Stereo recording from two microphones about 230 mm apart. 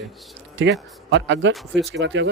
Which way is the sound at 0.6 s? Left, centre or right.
Right.